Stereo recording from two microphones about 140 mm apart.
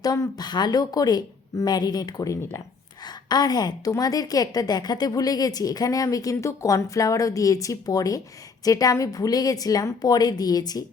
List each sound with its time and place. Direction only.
0.0 s a woman's voice: 25° left (ahead or behind)